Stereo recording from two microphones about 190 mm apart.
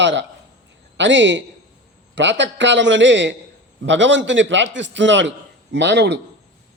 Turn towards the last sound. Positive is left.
turn(degrees=-65)  # may be behind; listen again after turning